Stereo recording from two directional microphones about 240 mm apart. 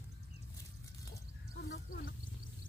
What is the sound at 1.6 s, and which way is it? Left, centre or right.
Speech, left.